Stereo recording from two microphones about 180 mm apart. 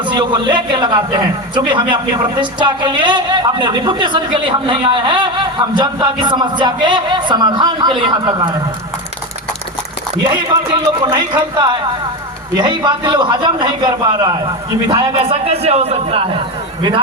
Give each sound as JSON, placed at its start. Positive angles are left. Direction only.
{"t": 0.0, "sound": "a woman's voice", "side_deg": -25}
{"t": 11.0, "sound": "a woman's voice", "side_deg": -20}